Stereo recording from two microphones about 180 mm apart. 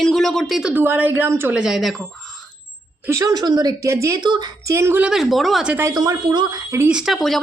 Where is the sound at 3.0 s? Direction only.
20° right (ahead or behind).